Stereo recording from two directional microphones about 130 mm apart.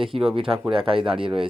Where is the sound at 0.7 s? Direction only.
45° right (ahead or behind).